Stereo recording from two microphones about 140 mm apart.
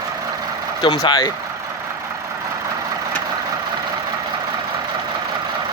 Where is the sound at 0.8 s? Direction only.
30° left (ahead or behind).